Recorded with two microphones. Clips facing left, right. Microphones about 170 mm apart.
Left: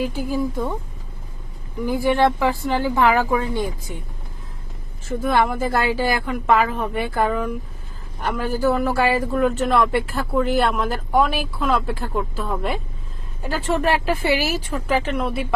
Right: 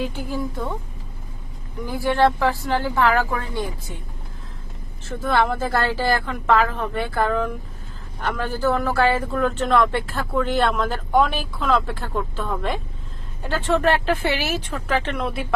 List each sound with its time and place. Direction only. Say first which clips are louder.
0.0 s a man's voice: left 4 dB; 10° left (ahead or behind)
1.9 s a man's voice: left 1 dB; 15° left (ahead or behind)
5.0 s a man's voice: left 1 dB; 15° left (ahead or behind)